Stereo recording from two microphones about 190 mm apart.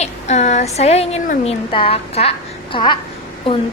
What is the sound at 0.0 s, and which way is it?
A woman's voice, 35° left (ahead or behind).